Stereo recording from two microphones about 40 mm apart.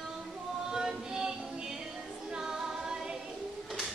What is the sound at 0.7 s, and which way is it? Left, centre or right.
Music, centre.